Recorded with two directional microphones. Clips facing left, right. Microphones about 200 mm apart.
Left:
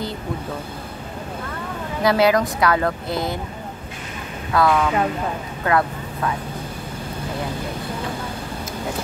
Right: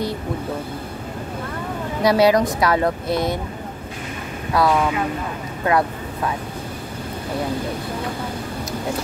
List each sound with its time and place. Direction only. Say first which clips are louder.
2.0 s a woman's voice: right 2 dB; 25° right (ahead or behind)
3.1 s speech: right 3 dB; centre (ahead or behind)
4.6 s a woman's voice: even; 25° right (ahead or behind)